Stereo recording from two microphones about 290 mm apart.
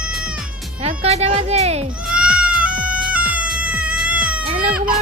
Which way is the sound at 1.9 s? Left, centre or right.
Centre.